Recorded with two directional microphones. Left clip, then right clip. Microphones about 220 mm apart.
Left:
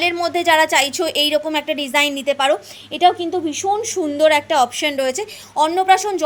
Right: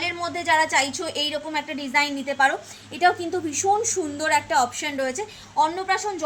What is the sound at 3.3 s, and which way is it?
A woman's voice, 15° left (ahead or behind).